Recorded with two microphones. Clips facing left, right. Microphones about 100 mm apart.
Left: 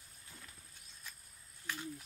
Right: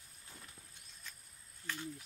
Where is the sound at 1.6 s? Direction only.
10° left (ahead or behind).